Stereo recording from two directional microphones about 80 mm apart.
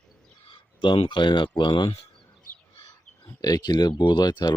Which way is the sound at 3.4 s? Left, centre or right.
Left.